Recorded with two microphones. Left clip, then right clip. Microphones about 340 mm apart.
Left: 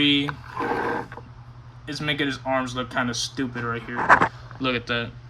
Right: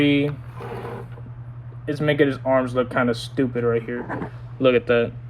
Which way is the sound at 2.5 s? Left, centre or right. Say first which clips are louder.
Right 5 dB; centre.